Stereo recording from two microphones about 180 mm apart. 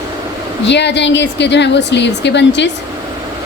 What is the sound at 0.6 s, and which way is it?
A woman's voice, 75° left (ahead or behind).